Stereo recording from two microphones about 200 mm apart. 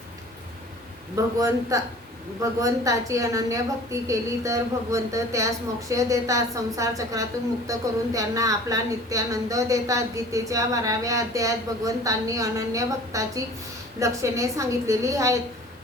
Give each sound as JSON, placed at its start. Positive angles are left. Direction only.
{"t": 1.1, "sound": "a woman's voice", "side_deg": -15}